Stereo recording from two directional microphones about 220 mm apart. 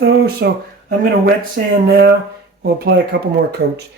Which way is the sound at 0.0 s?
55° right (ahead or behind).